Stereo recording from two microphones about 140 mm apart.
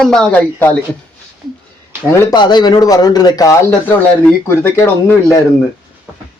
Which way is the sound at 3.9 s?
15° left (ahead or behind).